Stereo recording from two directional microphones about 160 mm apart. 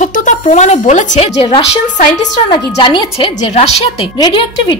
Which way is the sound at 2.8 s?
30° left (ahead or behind).